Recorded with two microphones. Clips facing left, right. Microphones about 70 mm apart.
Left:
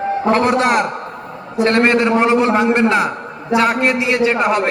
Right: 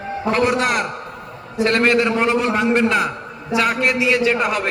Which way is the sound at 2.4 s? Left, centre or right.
Left.